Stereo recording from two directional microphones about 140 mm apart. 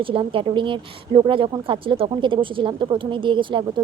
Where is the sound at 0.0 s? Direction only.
40° right (ahead or behind).